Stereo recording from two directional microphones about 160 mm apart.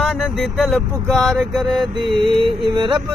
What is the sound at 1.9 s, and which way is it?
Music, 30° right (ahead or behind).